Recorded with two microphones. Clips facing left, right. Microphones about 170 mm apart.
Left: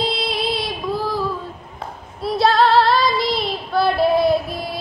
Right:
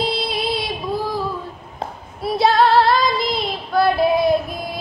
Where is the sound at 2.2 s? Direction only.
Centre (ahead or behind).